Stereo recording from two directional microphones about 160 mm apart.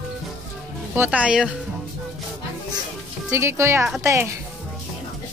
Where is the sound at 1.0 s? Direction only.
5° right (ahead or behind).